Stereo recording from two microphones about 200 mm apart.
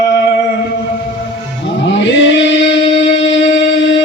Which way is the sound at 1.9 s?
65° left (ahead or behind).